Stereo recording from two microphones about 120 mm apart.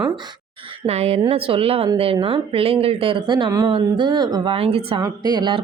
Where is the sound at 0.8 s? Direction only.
60° right (ahead or behind).